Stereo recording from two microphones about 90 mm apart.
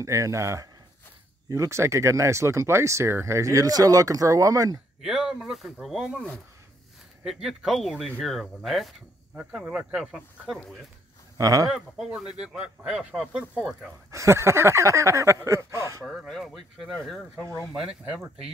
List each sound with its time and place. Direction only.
0.0 s speech: 35° right (ahead or behind)
5.0 s speech: 5° right (ahead or behind)
7.2 s speech: centre (ahead or behind)
9.3 s speech: 10° right (ahead or behind)
11.3 s speech: 45° right (ahead or behind)
11.7 s speech: 5° right (ahead or behind)
14.1 s speech: 35° right (ahead or behind)
16.1 s speech: centre (ahead or behind)
18.0 s speech: 10° right (ahead or behind)